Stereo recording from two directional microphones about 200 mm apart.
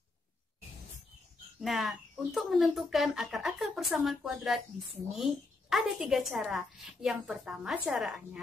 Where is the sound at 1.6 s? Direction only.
Centre (ahead or behind).